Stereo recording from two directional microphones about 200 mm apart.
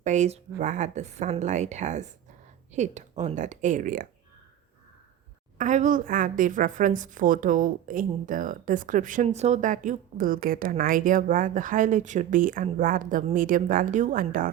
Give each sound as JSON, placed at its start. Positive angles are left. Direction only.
{"t": 0.0, "sound": "a woman's voice", "side_deg": -35}
{"t": 5.5, "sound": "a woman's voice", "side_deg": -40}